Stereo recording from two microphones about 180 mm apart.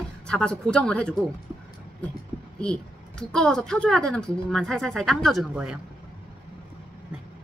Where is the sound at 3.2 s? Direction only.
5° left (ahead or behind).